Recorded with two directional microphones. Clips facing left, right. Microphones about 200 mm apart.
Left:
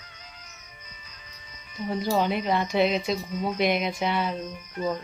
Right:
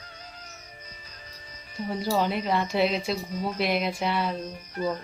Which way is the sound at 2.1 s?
Centre (ahead or behind).